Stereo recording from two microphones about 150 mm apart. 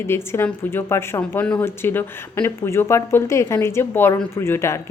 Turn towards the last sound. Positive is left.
turn(degrees=15)  # may be behind; listen again after turning